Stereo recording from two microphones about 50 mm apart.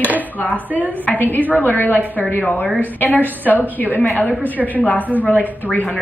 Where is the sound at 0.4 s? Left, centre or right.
Left.